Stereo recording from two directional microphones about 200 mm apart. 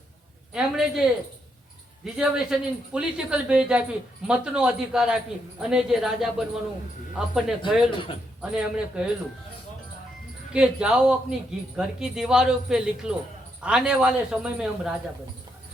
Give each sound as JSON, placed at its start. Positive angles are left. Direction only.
{"t": 0.5, "sound": "speech", "side_deg": -5}
{"t": 2.1, "sound": "speech", "side_deg": -5}
{"t": 7.9, "sound": "a man's voice", "side_deg": 25}
{"t": 8.4, "sound": "speech", "side_deg": -5}
{"t": 10.5, "sound": "speech", "side_deg": -5}